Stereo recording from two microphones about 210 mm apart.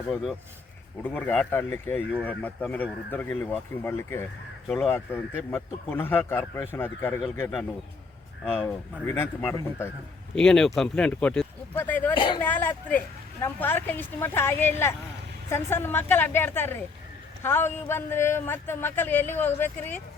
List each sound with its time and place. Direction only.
1.0 s speech: 5° left (ahead or behind)
8.4 s speech: 5° right (ahead or behind)
9.0 s speech: 10° left (ahead or behind)
12.1 s speech: 25° left (ahead or behind)
12.4 s speech: 10° left (ahead or behind)